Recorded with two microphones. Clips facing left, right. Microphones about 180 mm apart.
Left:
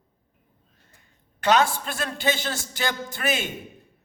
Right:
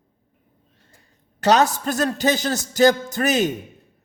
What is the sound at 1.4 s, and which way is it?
A man's voice, 40° right (ahead or behind).